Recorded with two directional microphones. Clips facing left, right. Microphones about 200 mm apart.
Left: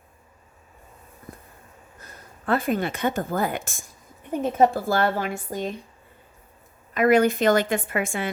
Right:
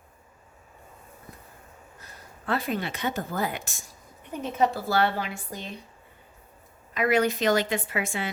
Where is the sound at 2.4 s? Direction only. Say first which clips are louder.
Left 5 dB; 50° left (ahead or behind).